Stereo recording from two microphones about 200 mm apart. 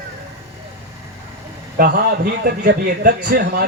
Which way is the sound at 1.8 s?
50° right (ahead or behind).